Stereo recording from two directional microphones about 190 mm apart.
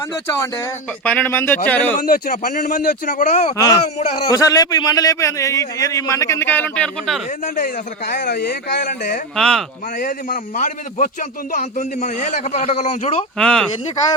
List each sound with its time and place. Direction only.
1.0 s a man's voice: 10° left (ahead or behind)
2.0 s a man's voice: 50° left (ahead or behind)
4.3 s a man's voice: 20° left (ahead or behind)
7.4 s a man's voice: 45° left (ahead or behind)
9.3 s speech: centre (ahead or behind)
10.0 s a man's voice: 45° left (ahead or behind)
13.4 s speech: 5° left (ahead or behind)